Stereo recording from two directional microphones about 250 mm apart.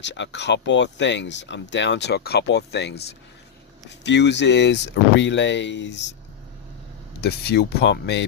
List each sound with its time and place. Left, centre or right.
0.0 s speech: left
7.2 s speech: left